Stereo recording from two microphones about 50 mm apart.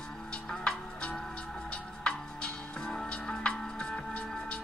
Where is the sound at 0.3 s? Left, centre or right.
Centre.